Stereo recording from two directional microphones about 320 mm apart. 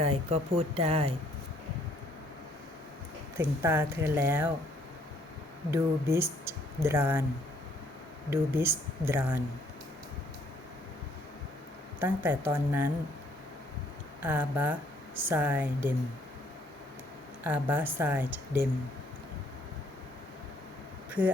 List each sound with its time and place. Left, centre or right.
0.0 s speech: centre
3.3 s speech: centre
5.7 s speech: centre
8.3 s speech: centre
11.9 s a woman's voice: centre
14.2 s a woman's voice: centre
17.4 s a woman's voice: centre